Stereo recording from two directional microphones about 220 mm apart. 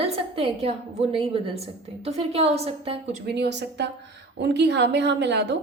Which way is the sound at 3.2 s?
50° right (ahead or behind).